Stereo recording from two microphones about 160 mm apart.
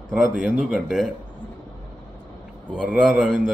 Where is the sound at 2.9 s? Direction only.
Centre (ahead or behind).